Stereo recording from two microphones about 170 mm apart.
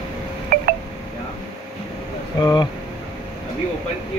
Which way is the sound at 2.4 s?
25° left (ahead or behind).